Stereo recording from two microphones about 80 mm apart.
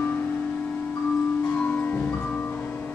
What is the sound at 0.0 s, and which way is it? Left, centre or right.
Music, left.